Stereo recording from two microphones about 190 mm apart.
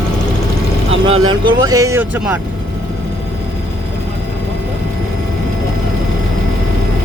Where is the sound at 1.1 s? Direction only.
25° right (ahead or behind).